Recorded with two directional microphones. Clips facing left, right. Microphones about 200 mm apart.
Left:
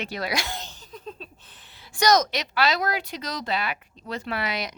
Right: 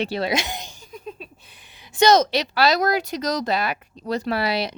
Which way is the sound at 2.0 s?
25° right (ahead or behind).